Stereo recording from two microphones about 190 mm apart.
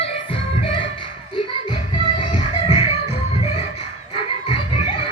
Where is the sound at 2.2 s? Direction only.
30° left (ahead or behind).